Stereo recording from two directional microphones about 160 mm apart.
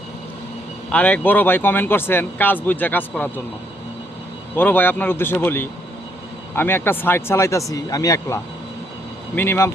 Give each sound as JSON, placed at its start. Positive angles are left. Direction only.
{"t": 0.9, "sound": "speech", "side_deg": 10}
{"t": 4.5, "sound": "speech", "side_deg": 10}